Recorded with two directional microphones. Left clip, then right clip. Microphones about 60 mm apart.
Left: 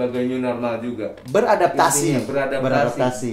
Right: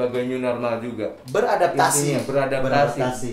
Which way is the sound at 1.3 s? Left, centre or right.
Left.